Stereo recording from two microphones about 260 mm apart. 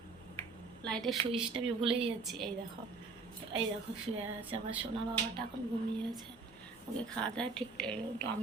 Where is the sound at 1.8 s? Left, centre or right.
Right.